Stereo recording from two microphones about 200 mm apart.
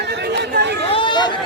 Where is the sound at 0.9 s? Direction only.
25° left (ahead or behind).